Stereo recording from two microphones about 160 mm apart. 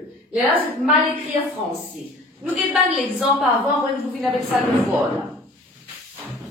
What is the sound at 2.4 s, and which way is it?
Speech, centre (ahead or behind).